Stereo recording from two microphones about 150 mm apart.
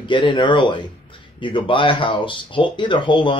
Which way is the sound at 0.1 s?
30° left (ahead or behind).